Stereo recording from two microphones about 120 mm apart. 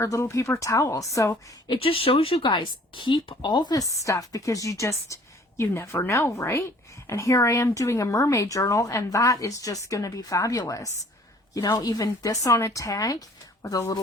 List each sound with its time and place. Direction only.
0.0 s a woman's voice: 25° left (ahead or behind)
1.6 s a woman's voice: 45° left (ahead or behind)